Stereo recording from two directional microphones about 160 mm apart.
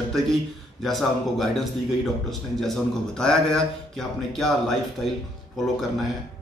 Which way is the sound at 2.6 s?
5° left (ahead or behind).